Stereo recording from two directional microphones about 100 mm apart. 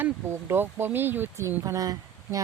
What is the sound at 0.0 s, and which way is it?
Speech, 20° right (ahead or behind).